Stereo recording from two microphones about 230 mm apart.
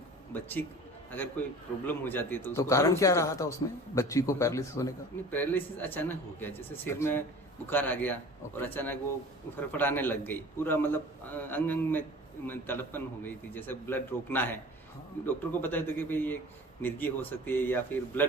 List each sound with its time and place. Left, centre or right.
0.3 s a man's voice: centre